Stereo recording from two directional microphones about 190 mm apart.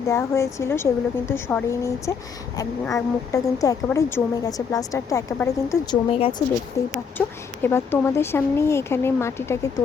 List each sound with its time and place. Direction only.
0.1 s a woman's voice: 15° left (ahead or behind)